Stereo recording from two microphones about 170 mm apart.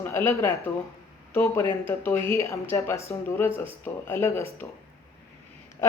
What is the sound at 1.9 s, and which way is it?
Speech, 15° left (ahead or behind).